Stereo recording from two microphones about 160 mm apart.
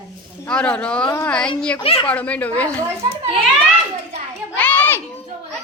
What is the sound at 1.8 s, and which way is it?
Speech, 35° left (ahead or behind).